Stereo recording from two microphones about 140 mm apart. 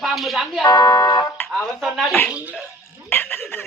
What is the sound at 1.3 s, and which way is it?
Music, 15° left (ahead or behind).